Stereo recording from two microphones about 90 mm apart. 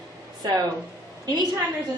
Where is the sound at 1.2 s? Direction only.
50° right (ahead or behind).